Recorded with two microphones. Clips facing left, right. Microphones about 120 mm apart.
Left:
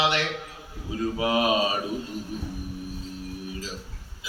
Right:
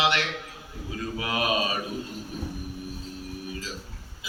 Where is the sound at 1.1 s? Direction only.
30° left (ahead or behind).